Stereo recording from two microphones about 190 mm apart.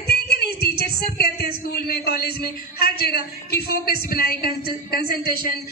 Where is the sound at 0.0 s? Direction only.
55° left (ahead or behind).